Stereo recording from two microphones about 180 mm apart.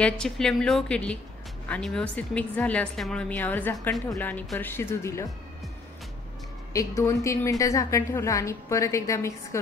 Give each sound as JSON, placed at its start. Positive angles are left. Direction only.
{"t": 0.0, "sound": "a woman's voice", "side_deg": 5}
{"t": 7.0, "sound": "a woman's voice", "side_deg": 15}